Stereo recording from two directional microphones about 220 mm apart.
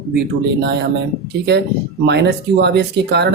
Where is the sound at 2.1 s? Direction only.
50° right (ahead or behind).